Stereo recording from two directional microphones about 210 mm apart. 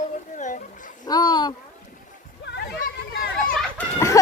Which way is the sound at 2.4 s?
55° left (ahead or behind).